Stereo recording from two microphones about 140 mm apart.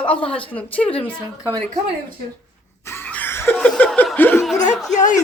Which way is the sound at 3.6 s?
5° left (ahead or behind).